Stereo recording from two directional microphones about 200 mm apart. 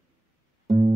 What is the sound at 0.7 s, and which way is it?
Music, 20° right (ahead or behind).